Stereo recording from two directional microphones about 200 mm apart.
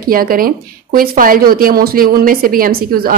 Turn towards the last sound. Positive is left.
turn(degrees=-45)  # may be behind; listen again after turning